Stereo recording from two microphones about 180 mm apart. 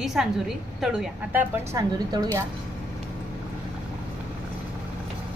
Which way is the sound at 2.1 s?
20° right (ahead or behind).